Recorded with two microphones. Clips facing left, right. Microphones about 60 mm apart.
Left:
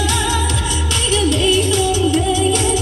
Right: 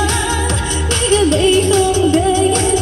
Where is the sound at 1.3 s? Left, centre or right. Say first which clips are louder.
Right 4 dB; right.